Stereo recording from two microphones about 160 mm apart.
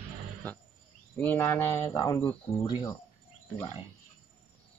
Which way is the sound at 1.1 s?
10° left (ahead or behind).